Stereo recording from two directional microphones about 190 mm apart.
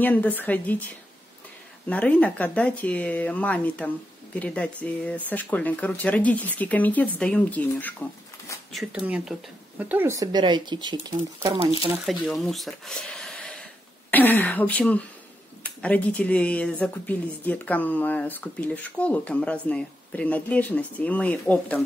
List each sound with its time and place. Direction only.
0.0 s speech: 10° left (ahead or behind)
1.9 s speech: 5° left (ahead or behind)
8.7 s speech: 5° right (ahead or behind); by 11.6 s 20° right (ahead or behind)
12.1 s speech: centre (ahead or behind)